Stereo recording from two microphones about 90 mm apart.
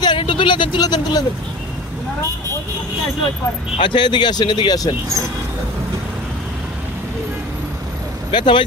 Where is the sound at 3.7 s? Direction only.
65° left (ahead or behind); by 4.9 s 45° left (ahead or behind).